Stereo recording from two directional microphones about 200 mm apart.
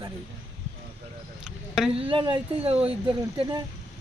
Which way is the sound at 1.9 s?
25° right (ahead or behind).